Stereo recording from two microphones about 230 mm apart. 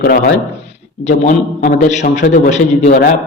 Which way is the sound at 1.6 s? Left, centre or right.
Left.